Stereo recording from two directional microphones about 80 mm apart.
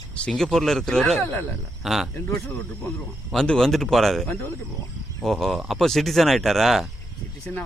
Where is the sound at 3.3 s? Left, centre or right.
Centre.